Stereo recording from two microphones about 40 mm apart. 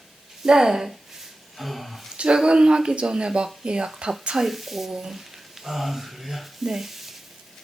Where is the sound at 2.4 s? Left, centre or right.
Right.